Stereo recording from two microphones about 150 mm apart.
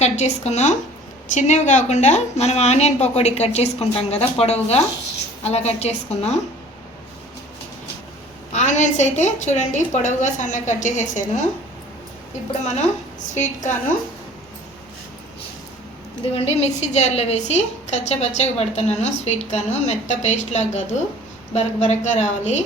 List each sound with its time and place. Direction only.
0.0 s a woman's voice: 50° left (ahead or behind)
8.5 s a woman's voice: 50° left (ahead or behind)
13.3 s a woman's voice: 55° left (ahead or behind)
16.3 s a woman's voice: 45° left (ahead or behind)